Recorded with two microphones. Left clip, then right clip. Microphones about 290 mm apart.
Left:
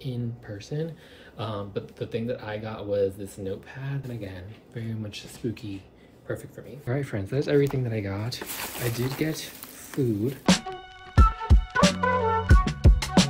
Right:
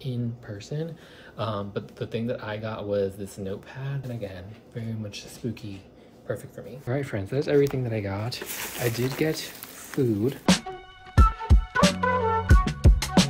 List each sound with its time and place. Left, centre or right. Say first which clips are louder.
0.0 s speech: right 1 dB; centre
10.4 s music: even; centre